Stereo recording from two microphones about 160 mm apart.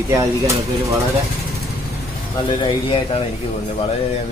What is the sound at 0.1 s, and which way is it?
Speech, 20° right (ahead or behind).